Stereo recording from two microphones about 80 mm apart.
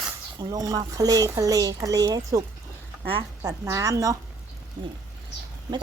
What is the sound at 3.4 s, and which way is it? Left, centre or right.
Speech, right.